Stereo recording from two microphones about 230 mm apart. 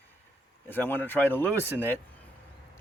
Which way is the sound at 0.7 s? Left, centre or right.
Centre.